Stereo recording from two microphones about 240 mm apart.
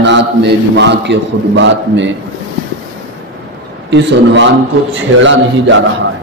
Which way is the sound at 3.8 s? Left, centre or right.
Right.